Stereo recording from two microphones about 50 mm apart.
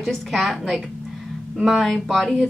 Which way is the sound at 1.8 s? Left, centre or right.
Centre.